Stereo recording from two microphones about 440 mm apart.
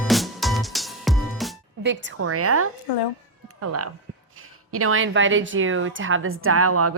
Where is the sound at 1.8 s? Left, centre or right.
Right.